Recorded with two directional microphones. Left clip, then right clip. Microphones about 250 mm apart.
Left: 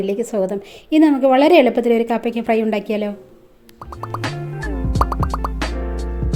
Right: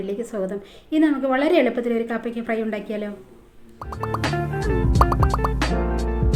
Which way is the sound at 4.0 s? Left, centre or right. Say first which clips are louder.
Right 2 dB; centre.